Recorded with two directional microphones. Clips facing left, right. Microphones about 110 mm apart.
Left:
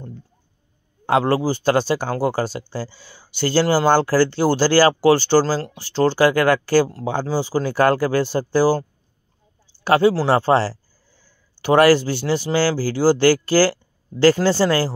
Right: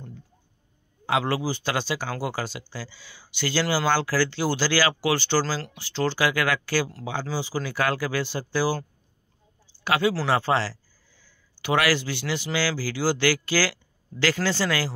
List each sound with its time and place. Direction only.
1.0 s speech: 45° left (ahead or behind)
9.8 s speech: 35° left (ahead or behind)